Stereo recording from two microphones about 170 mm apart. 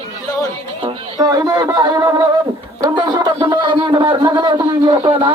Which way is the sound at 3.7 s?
30° right (ahead or behind).